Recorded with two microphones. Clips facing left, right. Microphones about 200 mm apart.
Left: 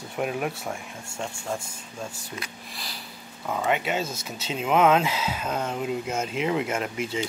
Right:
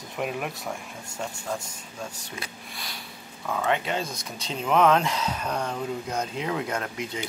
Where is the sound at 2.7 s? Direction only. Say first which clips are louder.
Even; centre (ahead or behind).